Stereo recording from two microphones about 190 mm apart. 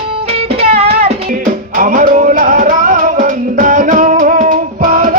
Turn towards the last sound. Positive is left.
turn(degrees=-45)  # may be behind; listen again after turning